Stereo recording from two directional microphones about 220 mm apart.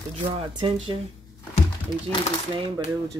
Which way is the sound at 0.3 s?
25° right (ahead or behind).